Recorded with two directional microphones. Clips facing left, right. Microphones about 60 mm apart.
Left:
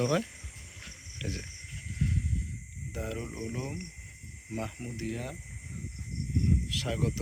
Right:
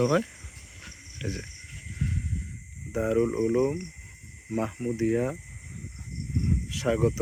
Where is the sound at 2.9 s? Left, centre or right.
Right.